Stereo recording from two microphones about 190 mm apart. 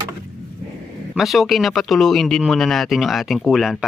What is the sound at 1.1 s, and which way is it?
Speech, centre (ahead or behind).